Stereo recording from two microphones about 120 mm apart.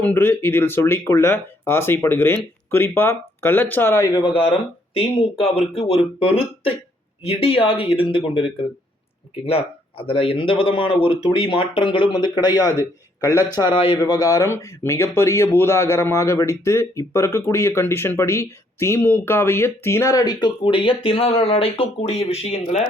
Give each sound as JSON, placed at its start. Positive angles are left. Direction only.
{"t": 0.0, "sound": "speech", "side_deg": 20}
{"t": 4.0, "sound": "speech", "side_deg": 35}
{"t": 4.4, "sound": "speech", "side_deg": 45}
{"t": 9.5, "sound": "speech", "side_deg": 50}
{"t": 13.6, "sound": "speech", "side_deg": 45}
{"t": 14.0, "sound": "speech", "side_deg": 30}